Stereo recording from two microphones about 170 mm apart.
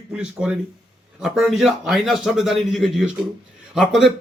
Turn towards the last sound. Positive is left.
turn(degrees=0)  # may be behind; listen again after turning